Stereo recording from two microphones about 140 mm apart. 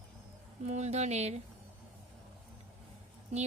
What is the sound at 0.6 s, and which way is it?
Speech, 55° right (ahead or behind).